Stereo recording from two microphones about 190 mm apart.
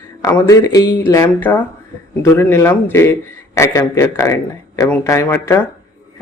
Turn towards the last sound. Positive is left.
turn(degrees=15)  # may be behind; listen again after turning